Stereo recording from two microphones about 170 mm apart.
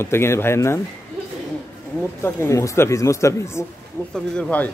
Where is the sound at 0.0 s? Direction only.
15° left (ahead or behind).